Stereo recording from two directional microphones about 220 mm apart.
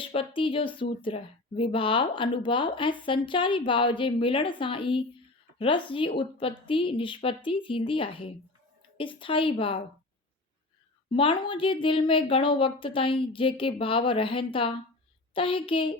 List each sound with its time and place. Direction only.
0.0 s speech: 25° left (ahead or behind)
11.1 s speech: 25° left (ahead or behind)